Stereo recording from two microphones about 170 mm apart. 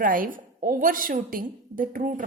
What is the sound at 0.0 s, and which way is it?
A woman's voice, 55° right (ahead or behind).